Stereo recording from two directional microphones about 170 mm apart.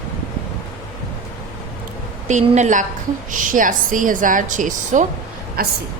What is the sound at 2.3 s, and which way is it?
A woman's voice, 45° right (ahead or behind).